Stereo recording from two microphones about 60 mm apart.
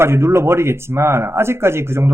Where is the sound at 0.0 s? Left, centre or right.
Right.